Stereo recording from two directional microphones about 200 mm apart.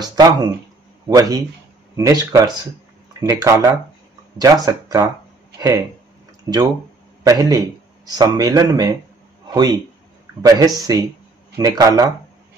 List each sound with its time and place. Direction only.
0.0 s a man's voice: 20° right (ahead or behind)